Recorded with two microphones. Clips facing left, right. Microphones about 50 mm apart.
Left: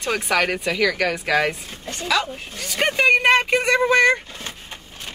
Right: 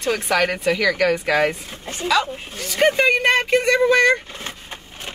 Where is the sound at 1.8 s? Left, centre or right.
Right.